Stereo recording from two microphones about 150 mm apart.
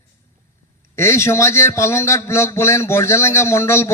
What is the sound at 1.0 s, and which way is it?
A man's voice, 20° left (ahead or behind).